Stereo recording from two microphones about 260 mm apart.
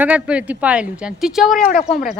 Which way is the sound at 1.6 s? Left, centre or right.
Left.